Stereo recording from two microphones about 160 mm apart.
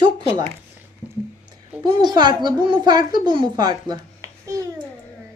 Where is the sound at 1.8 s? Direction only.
25° right (ahead or behind).